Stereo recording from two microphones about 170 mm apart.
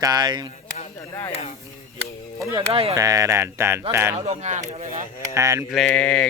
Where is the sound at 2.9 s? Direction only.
20° right (ahead or behind).